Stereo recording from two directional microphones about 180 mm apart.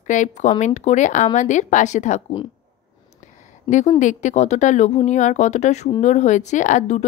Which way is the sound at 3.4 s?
40° left (ahead or behind).